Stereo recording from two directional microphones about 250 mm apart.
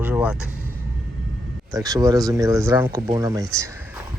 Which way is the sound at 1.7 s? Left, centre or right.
Centre.